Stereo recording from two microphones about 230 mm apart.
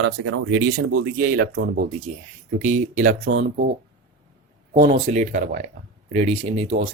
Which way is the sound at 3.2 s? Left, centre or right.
Right.